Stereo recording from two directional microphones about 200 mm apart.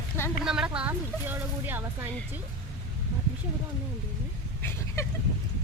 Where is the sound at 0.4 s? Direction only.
5° right (ahead or behind).